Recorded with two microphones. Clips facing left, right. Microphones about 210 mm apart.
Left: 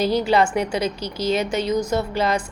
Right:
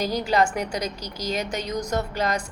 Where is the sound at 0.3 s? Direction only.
40° right (ahead or behind).